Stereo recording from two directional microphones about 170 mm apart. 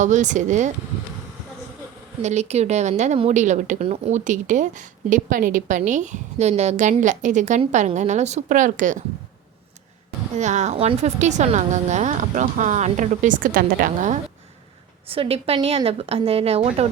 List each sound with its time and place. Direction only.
0.0 s a woman's voice: 45° right (ahead or behind)
2.2 s a woman's voice: 40° right (ahead or behind)
10.3 s a woman's voice: 45° right (ahead or behind)
15.0 s speech: 35° right (ahead or behind)